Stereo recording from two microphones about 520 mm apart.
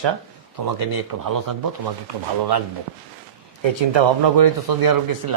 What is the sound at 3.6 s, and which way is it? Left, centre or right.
A man's voice, right.